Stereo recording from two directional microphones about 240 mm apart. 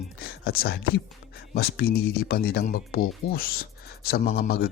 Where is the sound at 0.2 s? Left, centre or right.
Left.